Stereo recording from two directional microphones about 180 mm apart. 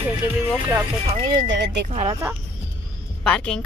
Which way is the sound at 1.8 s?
35° right (ahead or behind).